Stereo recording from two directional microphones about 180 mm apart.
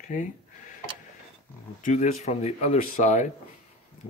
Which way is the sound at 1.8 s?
45° left (ahead or behind).